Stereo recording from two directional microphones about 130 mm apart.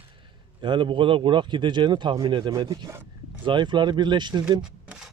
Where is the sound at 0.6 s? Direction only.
40° right (ahead or behind).